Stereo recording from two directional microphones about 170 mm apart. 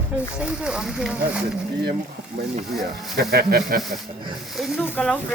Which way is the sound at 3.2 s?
65° right (ahead or behind).